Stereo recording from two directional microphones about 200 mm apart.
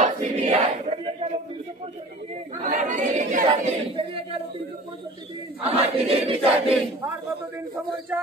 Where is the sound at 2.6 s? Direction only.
40° right (ahead or behind).